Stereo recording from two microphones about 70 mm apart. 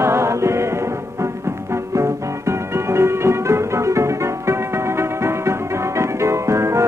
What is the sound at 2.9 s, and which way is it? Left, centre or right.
Music, right.